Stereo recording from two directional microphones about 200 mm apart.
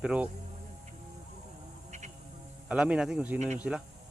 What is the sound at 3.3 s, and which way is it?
Speech, 35° right (ahead or behind).